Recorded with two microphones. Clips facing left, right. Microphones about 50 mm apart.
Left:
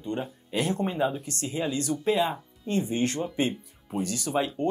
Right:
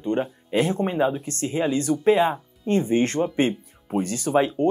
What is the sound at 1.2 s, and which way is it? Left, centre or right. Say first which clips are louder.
Speech: right 6 dB; right.